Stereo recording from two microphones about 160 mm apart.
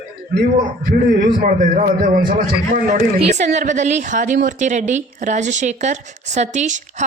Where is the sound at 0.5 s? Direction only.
70° right (ahead or behind).